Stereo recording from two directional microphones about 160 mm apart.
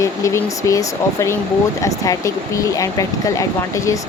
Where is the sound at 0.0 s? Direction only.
20° left (ahead or behind).